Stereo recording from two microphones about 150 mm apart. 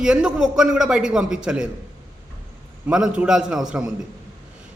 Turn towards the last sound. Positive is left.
turn(degrees=-5)  # may be behind; listen again after turning